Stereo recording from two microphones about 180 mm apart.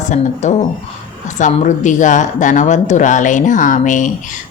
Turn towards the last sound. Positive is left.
turn(degrees=45)  # may be behind; listen again after turning